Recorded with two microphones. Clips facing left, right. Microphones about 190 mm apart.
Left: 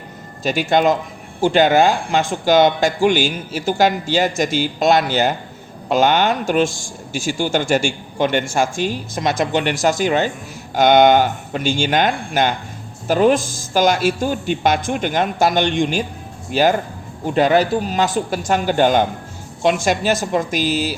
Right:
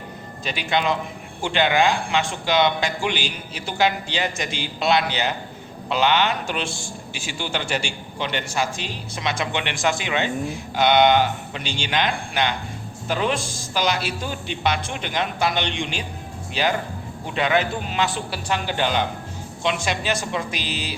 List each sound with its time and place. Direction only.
0.4 s a man's voice: 45° left (ahead or behind)